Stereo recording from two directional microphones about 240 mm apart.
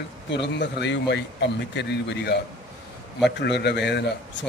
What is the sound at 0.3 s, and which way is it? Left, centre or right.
Speech, left.